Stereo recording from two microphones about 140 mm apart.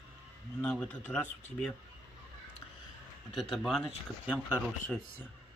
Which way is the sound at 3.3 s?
Centre (ahead or behind).